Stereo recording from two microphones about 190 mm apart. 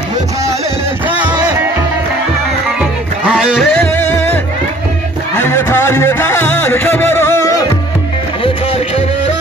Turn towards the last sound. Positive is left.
turn(degrees=15)  # may be behind; listen again after turning